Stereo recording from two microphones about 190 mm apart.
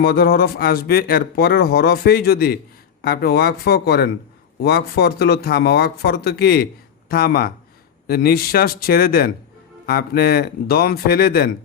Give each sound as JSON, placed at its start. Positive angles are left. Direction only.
{"t": 0.0, "sound": "speech", "side_deg": 50}